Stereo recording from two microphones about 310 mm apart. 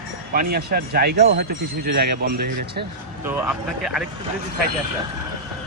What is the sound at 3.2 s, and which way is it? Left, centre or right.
Speech, centre.